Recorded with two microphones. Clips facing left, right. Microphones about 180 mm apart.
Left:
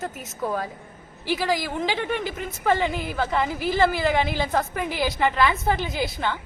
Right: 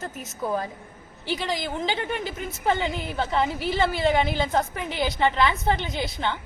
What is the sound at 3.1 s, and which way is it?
Speech, 30° right (ahead or behind).